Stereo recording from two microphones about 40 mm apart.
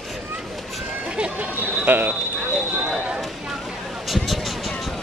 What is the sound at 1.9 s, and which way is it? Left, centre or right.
Speech, right.